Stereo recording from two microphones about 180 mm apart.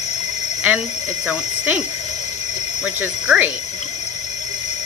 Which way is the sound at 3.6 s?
40° left (ahead or behind).